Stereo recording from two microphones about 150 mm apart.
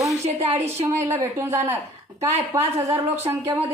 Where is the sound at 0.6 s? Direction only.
15° right (ahead or behind).